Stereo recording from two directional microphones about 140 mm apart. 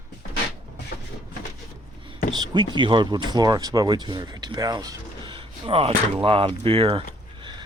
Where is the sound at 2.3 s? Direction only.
30° right (ahead or behind).